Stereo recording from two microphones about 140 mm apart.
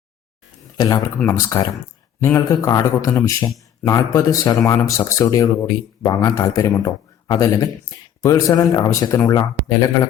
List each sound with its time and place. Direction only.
1.3 s speech: 25° left (ahead or behind)